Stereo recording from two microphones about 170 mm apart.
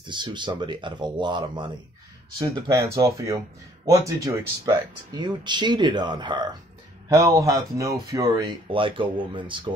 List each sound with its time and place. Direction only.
0.0 s speech: 25° right (ahead or behind)